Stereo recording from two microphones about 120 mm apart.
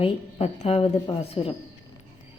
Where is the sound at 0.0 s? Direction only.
55° left (ahead or behind).